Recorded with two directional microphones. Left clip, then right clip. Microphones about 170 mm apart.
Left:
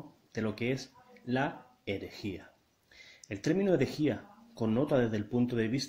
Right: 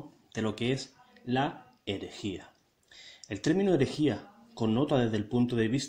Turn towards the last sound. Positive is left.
turn(degrees=-20)  # may be behind; listen again after turning